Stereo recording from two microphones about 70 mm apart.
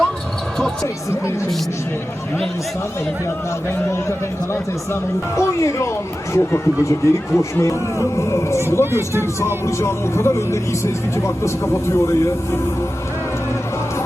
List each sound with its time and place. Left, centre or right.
3.7 s a man's voice: left
5.4 s speech: left